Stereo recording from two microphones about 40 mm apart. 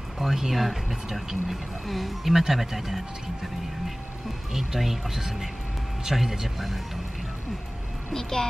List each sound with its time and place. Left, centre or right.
0.2 s speech: centre
4.6 s speech: centre
8.1 s a woman's voice: centre